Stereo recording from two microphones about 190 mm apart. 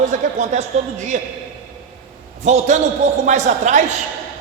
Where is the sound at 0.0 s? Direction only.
40° right (ahead or behind).